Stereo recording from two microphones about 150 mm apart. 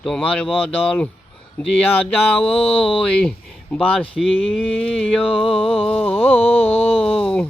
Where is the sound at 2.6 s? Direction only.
40° left (ahead or behind).